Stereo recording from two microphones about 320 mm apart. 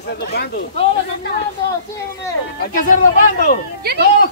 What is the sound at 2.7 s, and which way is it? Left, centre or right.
Speech, left.